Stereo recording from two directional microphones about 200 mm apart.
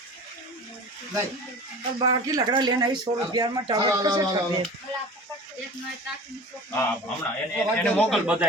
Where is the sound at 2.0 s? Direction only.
15° right (ahead or behind).